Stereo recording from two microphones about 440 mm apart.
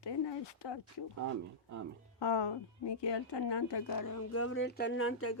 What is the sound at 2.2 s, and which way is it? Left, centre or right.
Speech, left.